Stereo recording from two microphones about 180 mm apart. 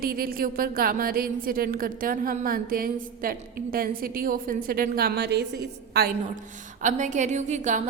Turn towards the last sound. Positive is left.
turn(degrees=-40)  # may be behind; listen again after turning